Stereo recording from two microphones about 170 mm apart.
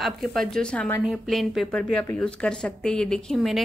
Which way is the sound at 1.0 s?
Centre (ahead or behind).